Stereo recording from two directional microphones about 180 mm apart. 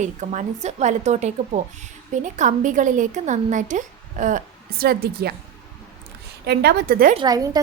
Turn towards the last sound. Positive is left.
turn(degrees=-20)  # may be behind; listen again after turning